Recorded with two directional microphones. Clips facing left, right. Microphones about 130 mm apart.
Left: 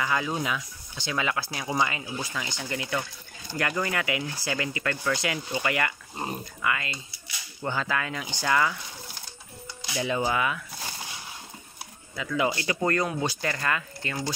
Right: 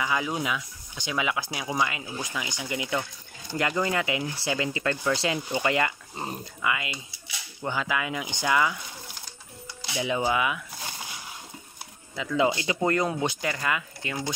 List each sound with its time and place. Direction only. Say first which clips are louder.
0.0 s speech: even; 15° right (ahead or behind)
1.7 s speech: left 1 dB; 5° right (ahead or behind)
9.9 s speech: right 1 dB; 15° right (ahead or behind)
12.4 s speech: right 2 dB; 20° right (ahead or behind)